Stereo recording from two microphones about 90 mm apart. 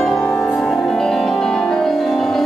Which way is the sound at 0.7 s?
5° left (ahead or behind).